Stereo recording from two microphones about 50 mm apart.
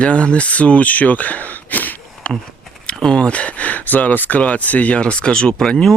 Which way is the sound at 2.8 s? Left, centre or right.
Left.